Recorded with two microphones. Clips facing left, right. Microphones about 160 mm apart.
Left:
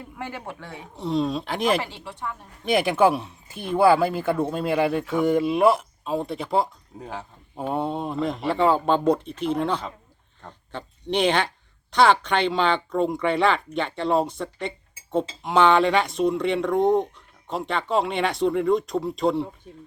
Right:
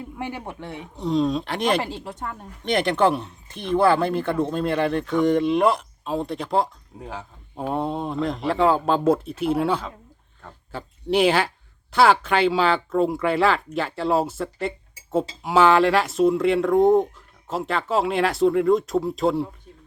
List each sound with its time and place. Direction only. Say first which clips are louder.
0.2 s speech: right 2 dB; 15° right (ahead or behind)
0.9 s speech: right 2 dB; centre (ahead or behind)
2.0 s speech: right 1 dB; 45° right (ahead or behind)
2.6 s speech: left 1 dB; 5° left (ahead or behind)